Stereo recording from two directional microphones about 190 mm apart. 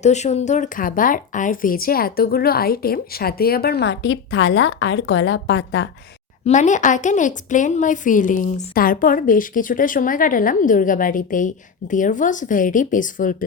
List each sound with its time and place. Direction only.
0.0 s a woman's voice: 35° left (ahead or behind); by 5.9 s 70° left (ahead or behind)
6.4 s a woman's voice: 40° left (ahead or behind)